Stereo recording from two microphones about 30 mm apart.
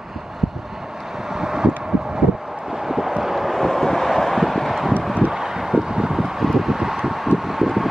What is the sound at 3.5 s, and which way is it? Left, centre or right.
Vehicle, centre.